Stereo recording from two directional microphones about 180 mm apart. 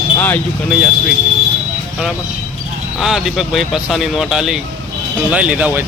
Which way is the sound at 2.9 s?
Centre (ahead or behind).